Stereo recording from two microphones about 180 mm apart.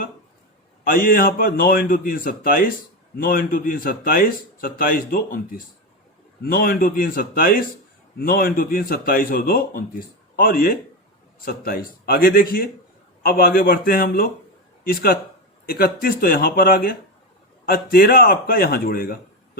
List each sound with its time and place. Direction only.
0.9 s a man's voice: 50° left (ahead or behind)